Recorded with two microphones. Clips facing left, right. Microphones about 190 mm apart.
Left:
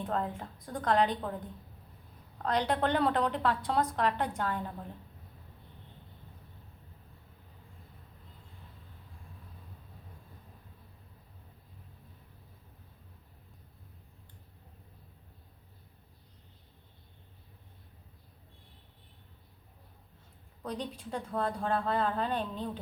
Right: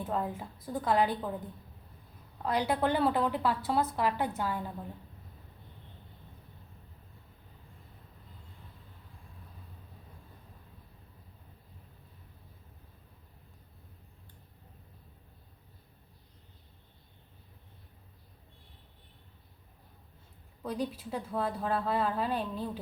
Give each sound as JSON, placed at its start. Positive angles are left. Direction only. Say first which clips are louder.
{"t": 0.0, "sound": "a woman's voice", "louder": "even", "side_deg": -5}
{"t": 2.4, "sound": "a woman's voice", "louder": "even", "side_deg": -10}
{"t": 20.6, "sound": "speech", "louder": "right 3 dB", "side_deg": -5}